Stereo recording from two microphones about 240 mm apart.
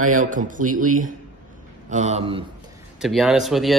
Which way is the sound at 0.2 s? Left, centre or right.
Right.